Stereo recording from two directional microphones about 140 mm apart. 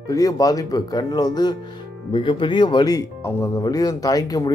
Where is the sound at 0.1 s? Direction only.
25° left (ahead or behind).